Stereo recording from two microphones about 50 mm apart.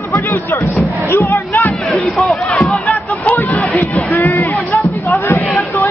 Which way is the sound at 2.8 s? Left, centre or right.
Left.